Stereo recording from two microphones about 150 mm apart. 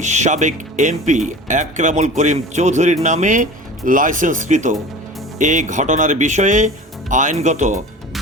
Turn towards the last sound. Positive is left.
turn(degrees=-55)  # may be behind; listen again after turning